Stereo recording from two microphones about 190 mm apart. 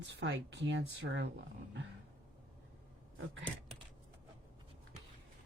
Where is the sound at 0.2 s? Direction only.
65° right (ahead or behind).